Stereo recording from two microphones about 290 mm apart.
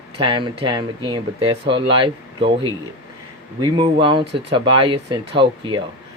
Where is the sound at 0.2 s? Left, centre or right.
Centre.